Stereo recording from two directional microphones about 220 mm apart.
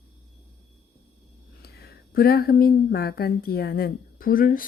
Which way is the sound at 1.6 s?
45° left (ahead or behind).